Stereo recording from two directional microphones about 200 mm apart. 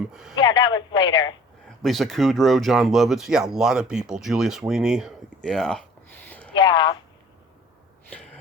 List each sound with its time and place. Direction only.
0.1 s speech: centre (ahead or behind)
0.3 s a sound: 20° left (ahead or behind)
1.8 s speech: centre (ahead or behind)
6.2 s a sound: 10° left (ahead or behind)
6.6 s speech: 25° left (ahead or behind)
8.1 s gasp: 5° left (ahead or behind)